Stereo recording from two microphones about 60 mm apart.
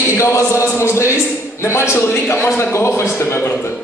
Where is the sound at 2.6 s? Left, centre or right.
Left.